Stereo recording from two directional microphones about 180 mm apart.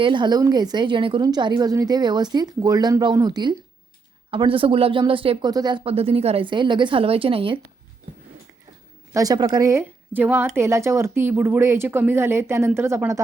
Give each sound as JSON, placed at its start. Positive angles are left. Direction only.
{"t": 0.0, "sound": "a woman's voice", "side_deg": -25}
{"t": 9.1, "sound": "a woman's voice", "side_deg": -20}